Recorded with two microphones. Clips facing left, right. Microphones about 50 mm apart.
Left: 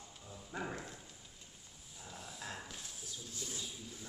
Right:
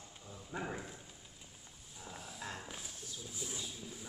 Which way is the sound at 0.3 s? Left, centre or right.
Centre.